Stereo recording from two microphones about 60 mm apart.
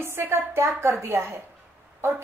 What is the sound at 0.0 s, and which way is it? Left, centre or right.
A woman's voice, right.